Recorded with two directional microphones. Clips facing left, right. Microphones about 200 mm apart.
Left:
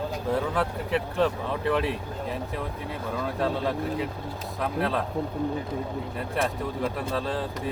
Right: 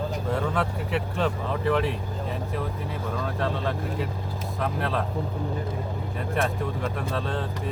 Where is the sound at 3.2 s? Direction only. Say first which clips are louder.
Left 3 dB; 5° left (ahead or behind).